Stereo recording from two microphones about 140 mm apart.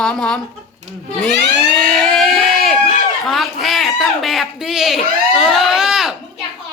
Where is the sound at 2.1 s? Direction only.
Centre (ahead or behind).